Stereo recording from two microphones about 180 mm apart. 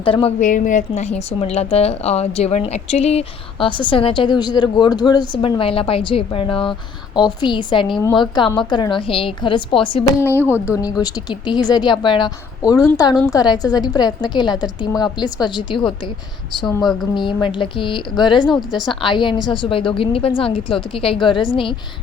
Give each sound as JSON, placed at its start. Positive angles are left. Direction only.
{"t": 0.0, "sound": "a woman's voice", "side_deg": 30}
{"t": 0.3, "sound": "a woman's voice", "side_deg": 45}
{"t": 16.8, "sound": "speech", "side_deg": 0}
{"t": 17.2, "sound": "a woman's voice", "side_deg": 25}